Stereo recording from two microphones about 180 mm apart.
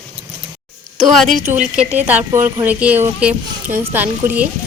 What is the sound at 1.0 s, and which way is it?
Speech, centre (ahead or behind).